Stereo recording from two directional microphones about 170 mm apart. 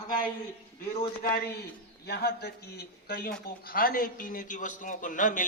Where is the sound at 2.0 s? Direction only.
75° left (ahead or behind).